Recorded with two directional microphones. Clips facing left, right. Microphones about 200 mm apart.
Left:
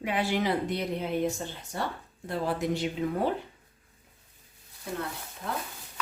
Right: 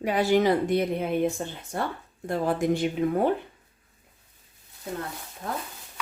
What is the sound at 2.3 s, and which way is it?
A woman's voice, 50° right (ahead or behind).